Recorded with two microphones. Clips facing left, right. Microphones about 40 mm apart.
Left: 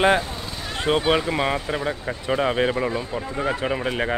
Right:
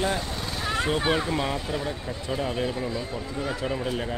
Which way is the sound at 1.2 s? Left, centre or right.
Left.